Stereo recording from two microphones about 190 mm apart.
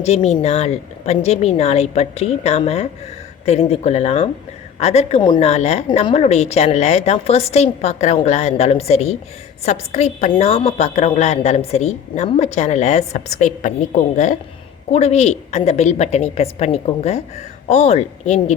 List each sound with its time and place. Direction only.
0.0 s a woman's voice: 35° left (ahead or behind)